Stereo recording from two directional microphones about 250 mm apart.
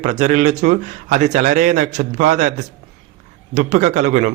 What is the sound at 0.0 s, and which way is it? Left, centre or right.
A man's voice, right.